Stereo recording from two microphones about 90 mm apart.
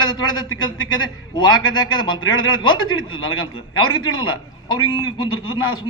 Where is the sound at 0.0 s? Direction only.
55° left (ahead or behind).